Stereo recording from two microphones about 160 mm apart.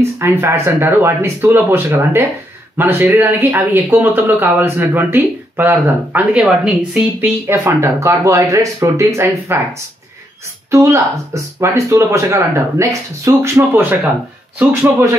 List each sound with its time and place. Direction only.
0.0 s speech: 15° right (ahead or behind)
10.7 s speech: 20° right (ahead or behind)